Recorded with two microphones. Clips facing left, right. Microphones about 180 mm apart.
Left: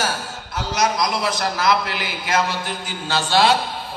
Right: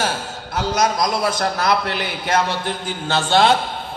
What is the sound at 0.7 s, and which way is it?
Speech, 45° right (ahead or behind).